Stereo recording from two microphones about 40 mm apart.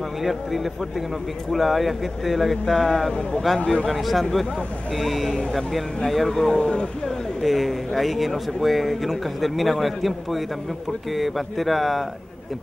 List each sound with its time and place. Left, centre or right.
0.2 s speech: centre
3.1 s speech: centre
3.9 s speech: centre
6.3 s speech: centre
7.1 s speech: centre